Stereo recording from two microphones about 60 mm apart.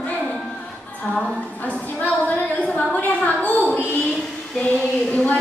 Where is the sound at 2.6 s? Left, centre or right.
Left.